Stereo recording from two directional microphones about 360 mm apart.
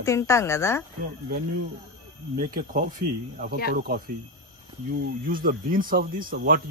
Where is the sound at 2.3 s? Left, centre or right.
Right.